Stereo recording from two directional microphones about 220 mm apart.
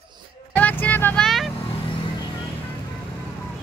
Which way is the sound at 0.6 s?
5° left (ahead or behind).